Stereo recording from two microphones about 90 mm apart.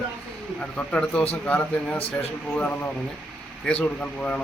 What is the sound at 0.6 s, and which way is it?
Speech, 15° left (ahead or behind).